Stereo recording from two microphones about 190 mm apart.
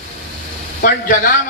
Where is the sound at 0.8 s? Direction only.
45° left (ahead or behind).